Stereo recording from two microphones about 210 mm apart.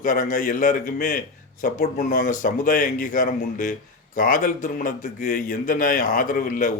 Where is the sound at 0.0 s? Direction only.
40° left (ahead or behind).